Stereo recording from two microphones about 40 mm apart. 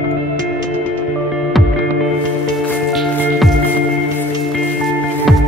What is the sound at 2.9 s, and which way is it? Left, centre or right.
Music, centre.